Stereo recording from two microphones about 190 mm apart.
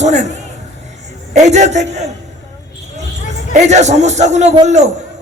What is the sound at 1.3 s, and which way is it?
Speech, 40° right (ahead or behind).